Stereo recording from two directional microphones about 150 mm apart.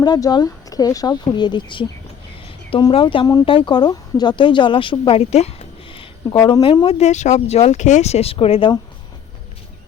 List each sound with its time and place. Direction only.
0.0 s speech: 25° left (ahead or behind)
6.3 s speech: 20° left (ahead or behind)
6.6 s speech: 35° left (ahead or behind)